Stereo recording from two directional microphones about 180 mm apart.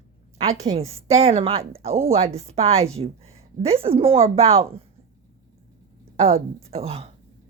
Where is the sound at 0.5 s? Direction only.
20° right (ahead or behind).